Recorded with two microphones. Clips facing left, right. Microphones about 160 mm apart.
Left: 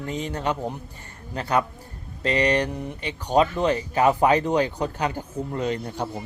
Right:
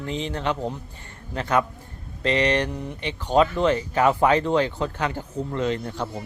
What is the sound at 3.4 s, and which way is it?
Speech, 15° left (ahead or behind).